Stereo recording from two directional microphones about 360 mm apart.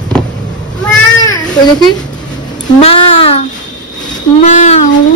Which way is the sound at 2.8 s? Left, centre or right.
Centre.